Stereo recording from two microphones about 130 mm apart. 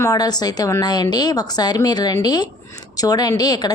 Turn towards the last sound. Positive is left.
turn(degrees=30)  # may be behind; listen again after turning